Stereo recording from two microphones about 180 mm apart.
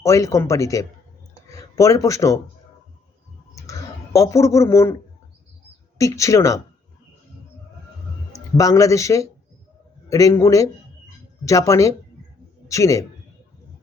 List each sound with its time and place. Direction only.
0.0 s speech: 15° left (ahead or behind)
3.5 s a sound: 15° left (ahead or behind)
6.0 s speech: 15° left (ahead or behind)
8.5 s a man's voice: 20° left (ahead or behind)